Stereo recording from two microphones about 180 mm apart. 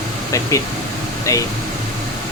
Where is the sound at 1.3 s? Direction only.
20° left (ahead or behind).